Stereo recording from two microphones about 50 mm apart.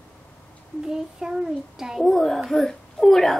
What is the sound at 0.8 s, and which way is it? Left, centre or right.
A child's voice, centre.